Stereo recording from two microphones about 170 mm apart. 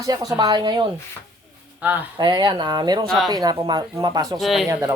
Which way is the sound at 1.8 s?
10° right (ahead or behind).